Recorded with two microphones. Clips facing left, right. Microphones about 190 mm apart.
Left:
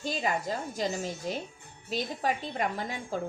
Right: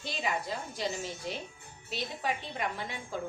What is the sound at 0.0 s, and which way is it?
A woman's voice, 45° left (ahead or behind).